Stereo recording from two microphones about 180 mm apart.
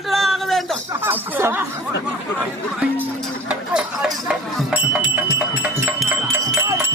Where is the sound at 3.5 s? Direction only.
5° right (ahead or behind).